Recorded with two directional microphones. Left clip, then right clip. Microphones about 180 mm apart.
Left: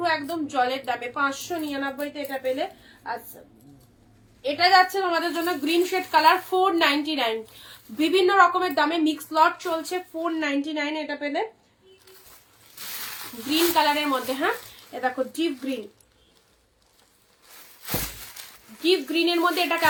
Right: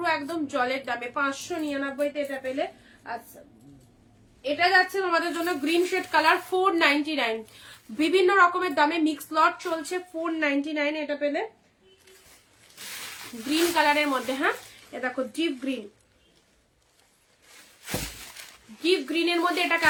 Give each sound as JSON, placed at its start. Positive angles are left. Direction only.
{"t": 0.0, "sound": "a woman's voice", "side_deg": -15}
{"t": 3.3, "sound": "a woman's voice", "side_deg": 0}
{"t": 13.5, "sound": "a woman's voice", "side_deg": -20}
{"t": 18.8, "sound": "a woman's voice", "side_deg": -20}